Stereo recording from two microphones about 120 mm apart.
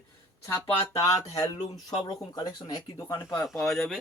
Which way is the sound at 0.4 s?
25° left (ahead or behind).